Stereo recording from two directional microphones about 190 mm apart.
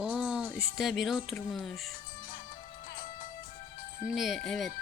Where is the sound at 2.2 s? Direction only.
45° left (ahead or behind).